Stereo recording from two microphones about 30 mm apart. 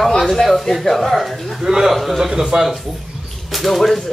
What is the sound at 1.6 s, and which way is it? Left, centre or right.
Speech, centre.